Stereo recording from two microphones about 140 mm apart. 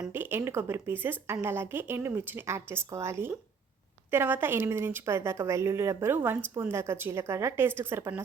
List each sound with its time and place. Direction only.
0.0 s a woman's voice: 15° right (ahead or behind)